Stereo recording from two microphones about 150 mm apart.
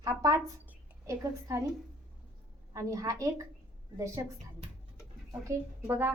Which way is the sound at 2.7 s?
20° right (ahead or behind).